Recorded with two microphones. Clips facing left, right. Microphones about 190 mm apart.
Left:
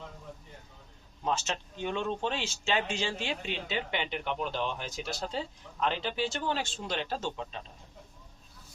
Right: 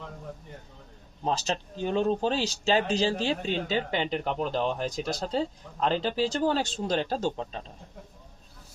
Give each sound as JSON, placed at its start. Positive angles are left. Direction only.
{"t": 1.2, "sound": "speech", "side_deg": -35}